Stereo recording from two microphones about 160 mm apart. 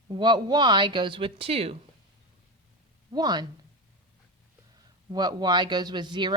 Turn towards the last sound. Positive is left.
turn(degrees=-30)  # may be behind; listen again after turning